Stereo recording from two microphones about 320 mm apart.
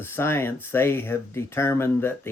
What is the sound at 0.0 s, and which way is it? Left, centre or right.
Speech, centre.